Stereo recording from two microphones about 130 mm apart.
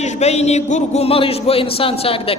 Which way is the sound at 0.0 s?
60° left (ahead or behind).